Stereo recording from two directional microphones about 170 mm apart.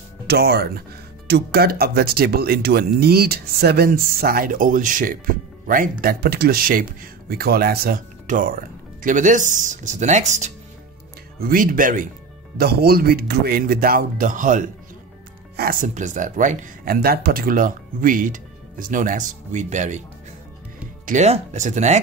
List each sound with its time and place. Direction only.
0.3 s speech: 70° right (ahead or behind); by 10.5 s 45° right (ahead or behind)
11.3 s speech: 60° right (ahead or behind)
12.5 s speech: 65° right (ahead or behind); by 14.7 s 50° right (ahead or behind)
15.5 s speech: 60° right (ahead or behind); by 20.0 s 45° right (ahead or behind)
21.0 s speech: 45° right (ahead or behind)